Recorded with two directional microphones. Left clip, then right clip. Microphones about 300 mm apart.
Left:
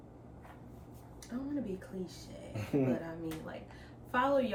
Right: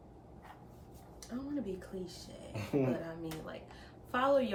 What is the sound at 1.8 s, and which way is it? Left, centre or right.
Speech, centre.